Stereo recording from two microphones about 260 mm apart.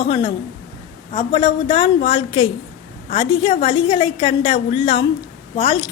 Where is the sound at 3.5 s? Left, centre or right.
Left.